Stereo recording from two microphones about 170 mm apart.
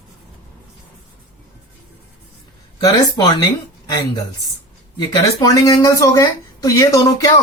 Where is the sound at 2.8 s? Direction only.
25° left (ahead or behind).